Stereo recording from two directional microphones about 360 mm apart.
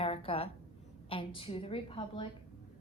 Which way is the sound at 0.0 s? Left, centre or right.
Centre.